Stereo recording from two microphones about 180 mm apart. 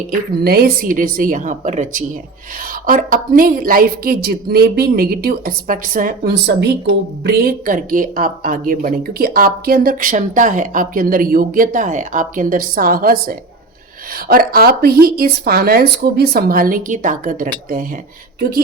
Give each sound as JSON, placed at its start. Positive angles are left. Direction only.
{"t": 0.1, "sound": "a woman's voice", "side_deg": -60}